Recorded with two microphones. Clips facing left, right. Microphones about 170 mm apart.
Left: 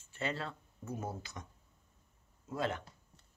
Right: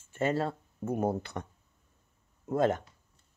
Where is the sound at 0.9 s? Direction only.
60° right (ahead or behind).